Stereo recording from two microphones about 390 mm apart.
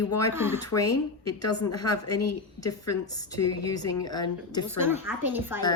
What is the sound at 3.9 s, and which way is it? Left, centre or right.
Speech, left.